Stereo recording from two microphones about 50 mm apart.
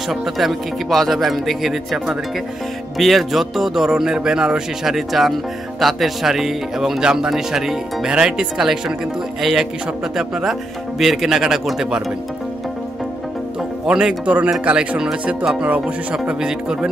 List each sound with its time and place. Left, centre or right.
0.1 s speech: centre
4.8 s speech: centre
13.6 s speech: centre
16.3 s speech: centre